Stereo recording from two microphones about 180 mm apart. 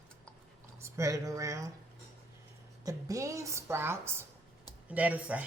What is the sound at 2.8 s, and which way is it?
Speech, 20° right (ahead or behind).